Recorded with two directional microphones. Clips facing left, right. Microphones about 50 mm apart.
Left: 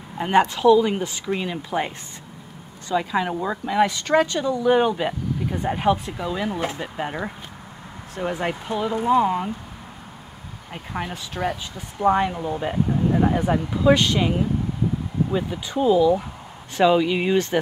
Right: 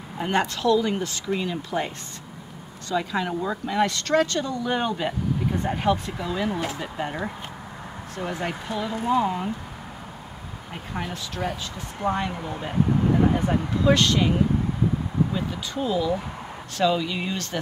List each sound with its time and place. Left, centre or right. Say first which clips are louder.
0.2 s speech: left 6 dB; centre
2.9 s speech: left 3 dB; centre
9.1 s speech: left 4 dB; centre
10.7 s speech: left 2 dB; centre
12.3 s speech: left 5 dB; centre
15.3 s speech: left 4 dB; centre